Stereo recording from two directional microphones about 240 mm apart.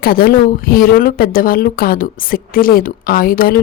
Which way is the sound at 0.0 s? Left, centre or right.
Left.